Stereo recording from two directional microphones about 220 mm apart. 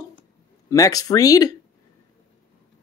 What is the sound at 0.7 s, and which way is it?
Mantra, 15° left (ahead or behind).